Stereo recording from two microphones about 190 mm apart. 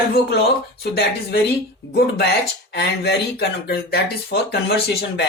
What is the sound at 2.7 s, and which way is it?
Speech, 60° left (ahead or behind).